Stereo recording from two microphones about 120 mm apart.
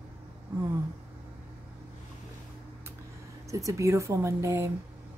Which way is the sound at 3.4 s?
25° right (ahead or behind).